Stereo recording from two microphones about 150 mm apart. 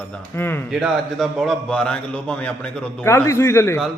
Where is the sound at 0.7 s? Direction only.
Centre (ahead or behind).